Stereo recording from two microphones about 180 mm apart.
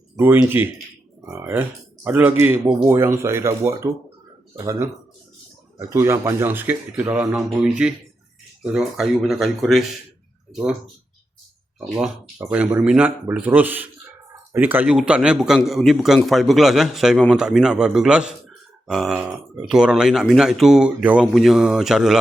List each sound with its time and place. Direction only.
0.3 s speech: 10° right (ahead or behind)
5.9 s a man's voice: 15° right (ahead or behind)
11.9 s a man's voice: 10° right (ahead or behind)